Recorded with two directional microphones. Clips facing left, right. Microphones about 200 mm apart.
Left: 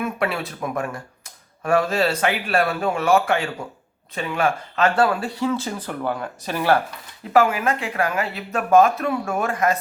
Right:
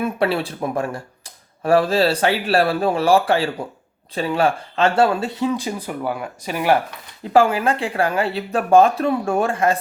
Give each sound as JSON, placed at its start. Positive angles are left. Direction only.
{"t": 0.0, "sound": "speech", "side_deg": -30}
{"t": 7.3, "sound": "speech", "side_deg": -30}